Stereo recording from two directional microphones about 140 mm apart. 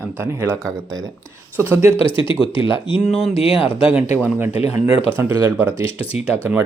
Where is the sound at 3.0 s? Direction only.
50° left (ahead or behind).